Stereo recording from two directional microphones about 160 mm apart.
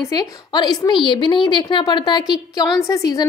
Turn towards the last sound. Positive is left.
turn(degrees=20)  # may be behind; listen again after turning